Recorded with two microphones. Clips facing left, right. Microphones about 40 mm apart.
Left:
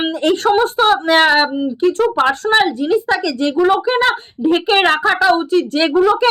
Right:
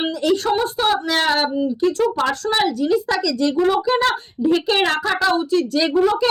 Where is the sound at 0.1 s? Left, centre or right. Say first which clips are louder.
Left 6 dB; left.